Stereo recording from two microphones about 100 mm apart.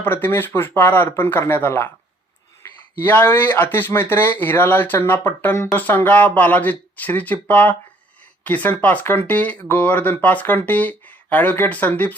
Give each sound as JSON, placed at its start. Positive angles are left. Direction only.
{"t": 0.0, "sound": "speech", "side_deg": 20}
{"t": 3.0, "sound": "speech", "side_deg": 20}